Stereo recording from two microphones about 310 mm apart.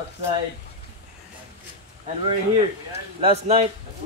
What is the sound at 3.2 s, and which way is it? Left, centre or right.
Speech, centre.